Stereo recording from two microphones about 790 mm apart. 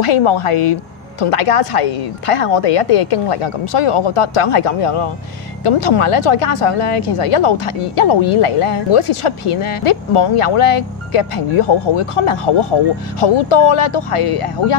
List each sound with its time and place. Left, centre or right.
0.0 s speech: left